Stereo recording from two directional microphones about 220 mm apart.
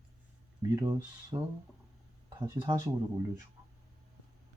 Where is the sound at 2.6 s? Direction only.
20° right (ahead or behind).